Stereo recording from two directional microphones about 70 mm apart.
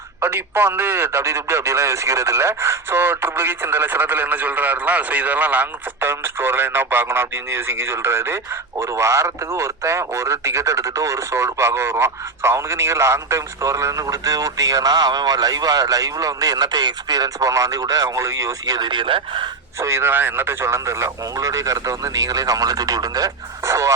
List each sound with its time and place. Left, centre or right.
0.2 s a man's voice: right
19.8 s speech: right
23.6 s speech: right